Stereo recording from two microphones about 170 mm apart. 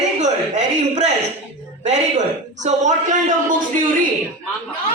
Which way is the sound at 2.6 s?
45° right (ahead or behind).